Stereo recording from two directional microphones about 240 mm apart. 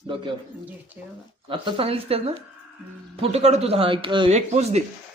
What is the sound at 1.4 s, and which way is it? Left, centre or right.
Speech, right.